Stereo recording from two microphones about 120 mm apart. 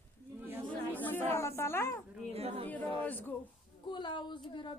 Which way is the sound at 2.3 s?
55° right (ahead or behind).